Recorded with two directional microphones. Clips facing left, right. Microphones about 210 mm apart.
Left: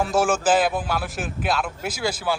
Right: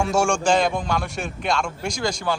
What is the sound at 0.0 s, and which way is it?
A man's voice, centre (ahead or behind).